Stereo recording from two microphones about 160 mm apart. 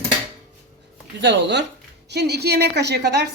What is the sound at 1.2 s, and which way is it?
A woman's voice, 90° right.